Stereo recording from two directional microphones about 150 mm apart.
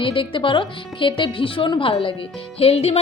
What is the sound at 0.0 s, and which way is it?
A woman's voice, 35° left (ahead or behind).